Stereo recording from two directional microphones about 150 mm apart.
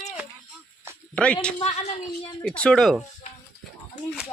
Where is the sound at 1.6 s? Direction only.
45° left (ahead or behind).